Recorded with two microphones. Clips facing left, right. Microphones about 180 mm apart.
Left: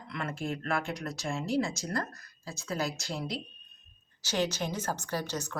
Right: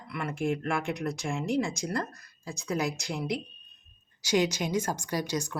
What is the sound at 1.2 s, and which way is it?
Speech, 15° right (ahead or behind).